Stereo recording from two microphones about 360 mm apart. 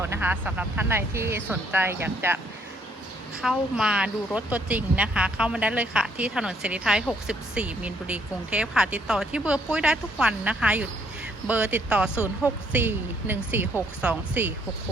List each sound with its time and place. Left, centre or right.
0.0 s speech: centre
3.4 s speech: centre